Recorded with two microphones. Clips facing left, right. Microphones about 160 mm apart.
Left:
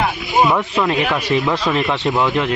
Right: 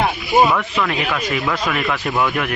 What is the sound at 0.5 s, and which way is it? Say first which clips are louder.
A man's voice: left 3 dB; 20° left (ahead or behind).